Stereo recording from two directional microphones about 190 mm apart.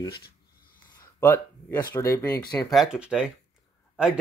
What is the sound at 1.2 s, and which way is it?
Speech, 10° left (ahead or behind).